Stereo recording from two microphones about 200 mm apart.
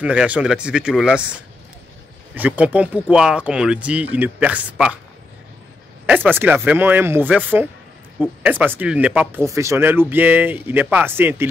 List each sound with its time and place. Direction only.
0.0 s speech: 5° right (ahead or behind)
6.0 s speech: 10° right (ahead or behind)